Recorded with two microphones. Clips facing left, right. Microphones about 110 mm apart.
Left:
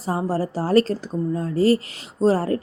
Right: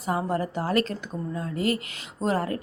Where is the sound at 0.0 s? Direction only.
30° left (ahead or behind).